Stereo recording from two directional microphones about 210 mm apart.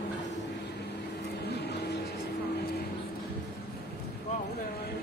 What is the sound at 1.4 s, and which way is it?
Vehicle, 50° left (ahead or behind).